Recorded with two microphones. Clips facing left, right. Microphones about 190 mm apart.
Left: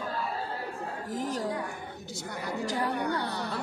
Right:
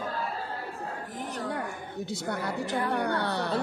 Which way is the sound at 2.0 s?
65° right (ahead or behind).